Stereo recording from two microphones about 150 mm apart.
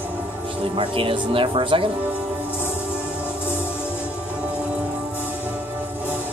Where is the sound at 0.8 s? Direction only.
35° right (ahead or behind).